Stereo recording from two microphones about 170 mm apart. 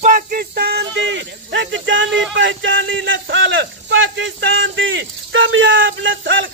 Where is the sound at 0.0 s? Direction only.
55° right (ahead or behind).